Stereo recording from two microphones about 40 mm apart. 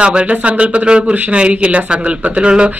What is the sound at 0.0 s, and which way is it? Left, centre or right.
Speech, right.